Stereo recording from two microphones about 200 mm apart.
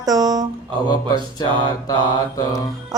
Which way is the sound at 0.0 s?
20° right (ahead or behind).